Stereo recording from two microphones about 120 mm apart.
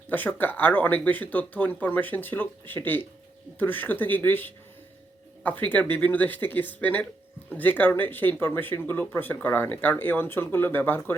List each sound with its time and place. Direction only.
0.1 s speech: 15° left (ahead or behind)